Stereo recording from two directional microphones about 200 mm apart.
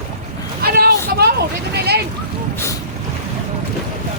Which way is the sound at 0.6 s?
50° right (ahead or behind).